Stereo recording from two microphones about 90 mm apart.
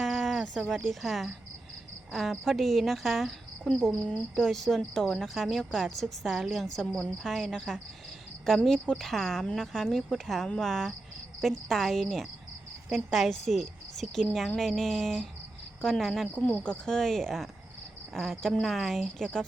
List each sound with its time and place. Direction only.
0.0 s a sound: centre (ahead or behind)
2.1 s a woman's voice: centre (ahead or behind)
16.4 s a woman's voice: 15° left (ahead or behind)